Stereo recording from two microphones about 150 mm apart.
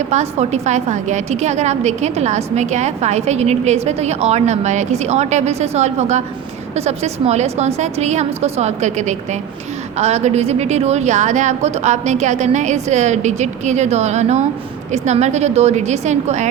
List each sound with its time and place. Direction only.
0.1 s a woman's voice: 45° right (ahead or behind)